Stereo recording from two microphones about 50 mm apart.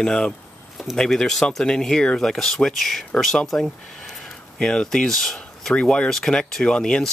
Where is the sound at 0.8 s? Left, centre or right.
Centre.